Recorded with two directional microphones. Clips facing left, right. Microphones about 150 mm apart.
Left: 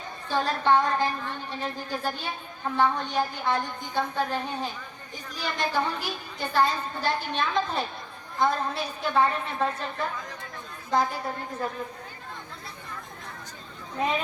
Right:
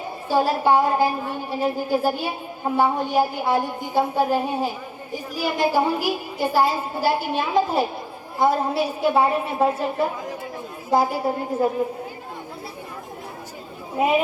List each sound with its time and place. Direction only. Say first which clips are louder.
0.3 s a woman's voice: right 5 dB; 10° right (ahead or behind)
14.0 s a woman's voice: right 7 dB; 10° right (ahead or behind)